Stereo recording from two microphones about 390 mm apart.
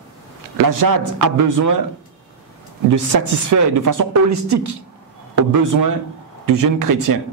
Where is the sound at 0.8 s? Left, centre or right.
Right.